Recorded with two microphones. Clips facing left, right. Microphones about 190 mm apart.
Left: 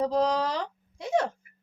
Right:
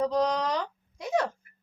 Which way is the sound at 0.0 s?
30° left (ahead or behind).